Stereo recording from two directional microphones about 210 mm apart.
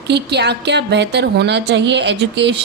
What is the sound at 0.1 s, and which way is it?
A woman's voice, 55° right (ahead or behind).